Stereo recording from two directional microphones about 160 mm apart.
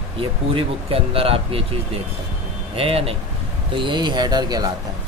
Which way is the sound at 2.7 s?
35° right (ahead or behind).